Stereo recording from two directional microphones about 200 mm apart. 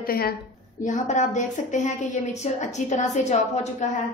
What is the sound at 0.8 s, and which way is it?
A woman's voice, 40° left (ahead or behind).